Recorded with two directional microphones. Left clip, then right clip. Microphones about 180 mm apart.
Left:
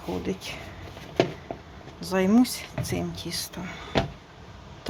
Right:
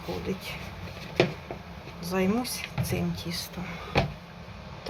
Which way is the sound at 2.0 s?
55° left (ahead or behind).